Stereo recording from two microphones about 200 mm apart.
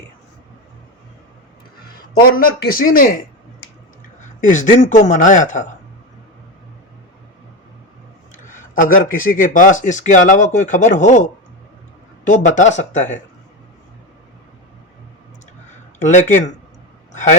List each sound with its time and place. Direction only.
2.2 s speech: 45° left (ahead or behind)
4.2 s speech: 40° left (ahead or behind)
8.4 s speech: 40° left (ahead or behind)
16.0 s speech: 40° left (ahead or behind)